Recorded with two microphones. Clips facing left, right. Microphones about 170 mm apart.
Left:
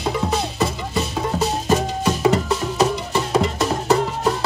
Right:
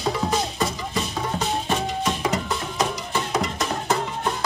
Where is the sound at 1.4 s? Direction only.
40° left (ahead or behind).